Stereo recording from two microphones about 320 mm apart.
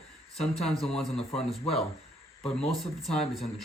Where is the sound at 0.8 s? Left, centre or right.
Centre.